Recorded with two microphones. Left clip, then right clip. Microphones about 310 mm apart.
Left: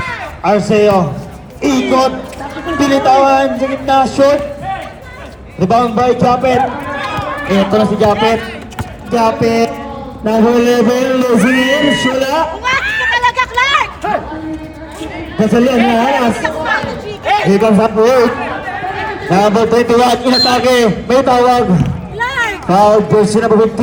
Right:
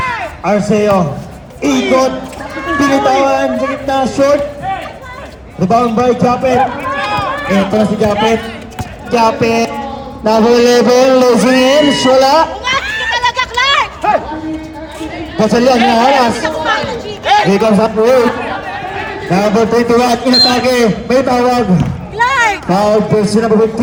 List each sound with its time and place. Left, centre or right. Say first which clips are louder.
0.4 s a man's voice: left 2 dB; left
2.7 s a man's voice: left 1 dB; left
5.5 s a man's voice: even; left
6.9 s run: right 4 dB; right
7.5 s a man's voice: left 2 dB; centre
8.1 s a man's voice: even; centre
9.0 s a man's voice: right 1 dB; centre
15.4 s speech: right 2 dB; right
17.2 s a sound: right 3 dB; right
17.5 s a man's voice: even; centre
19.3 s a man's voice: left 1 dB; centre
22.2 s a sound: right 5 dB; right
22.7 s a man's voice: left 7 dB; centre